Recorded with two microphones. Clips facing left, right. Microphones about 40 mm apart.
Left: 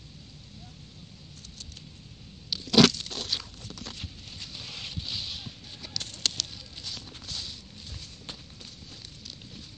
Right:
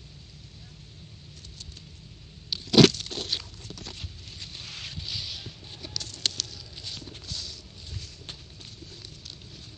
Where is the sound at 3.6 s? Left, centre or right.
Left.